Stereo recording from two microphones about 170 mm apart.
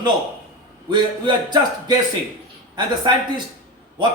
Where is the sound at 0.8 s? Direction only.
25° right (ahead or behind).